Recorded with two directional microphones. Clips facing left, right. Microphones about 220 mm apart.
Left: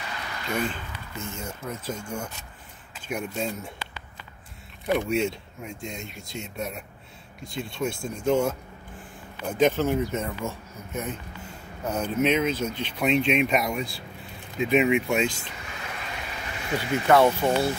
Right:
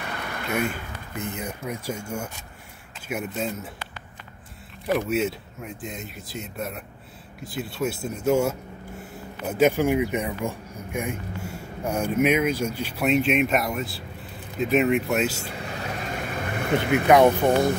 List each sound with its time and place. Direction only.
0.0 s a sound: 55° right (ahead or behind)
0.5 s speech: 10° right (ahead or behind)
4.8 s speech: centre (ahead or behind)
15.6 s vehicle: 40° right (ahead or behind); by 17.1 s 55° right (ahead or behind)
17.4 s speech: 15° right (ahead or behind)